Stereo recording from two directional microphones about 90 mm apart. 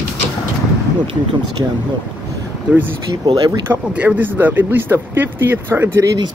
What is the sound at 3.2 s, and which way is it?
Speech, 55° right (ahead or behind).